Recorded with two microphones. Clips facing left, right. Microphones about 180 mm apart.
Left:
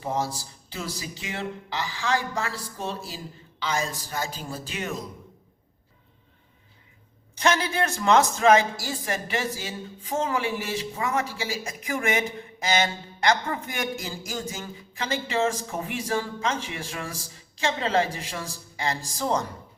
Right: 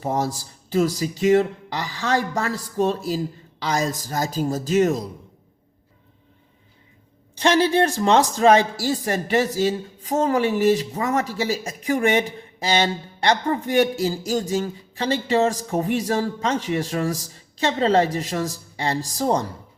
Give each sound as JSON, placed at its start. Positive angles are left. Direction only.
{"t": 0.0, "sound": "a man's voice", "side_deg": -45}
{"t": 7.3, "sound": "a man's voice", "side_deg": -30}